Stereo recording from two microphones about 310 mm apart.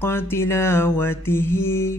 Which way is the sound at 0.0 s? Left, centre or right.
Centre.